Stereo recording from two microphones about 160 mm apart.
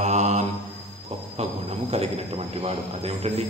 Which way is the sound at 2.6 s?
40° right (ahead or behind).